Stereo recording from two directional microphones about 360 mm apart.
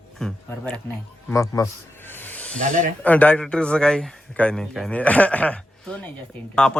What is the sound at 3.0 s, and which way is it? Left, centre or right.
Speech, centre.